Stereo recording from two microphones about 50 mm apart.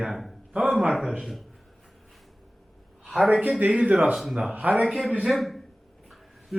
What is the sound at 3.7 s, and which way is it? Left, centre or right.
Speech, right.